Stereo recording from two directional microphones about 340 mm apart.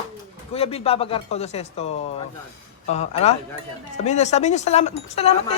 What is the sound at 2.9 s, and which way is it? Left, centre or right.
Speech, centre.